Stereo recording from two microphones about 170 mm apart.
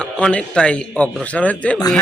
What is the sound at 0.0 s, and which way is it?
A man's voice, 5° left (ahead or behind).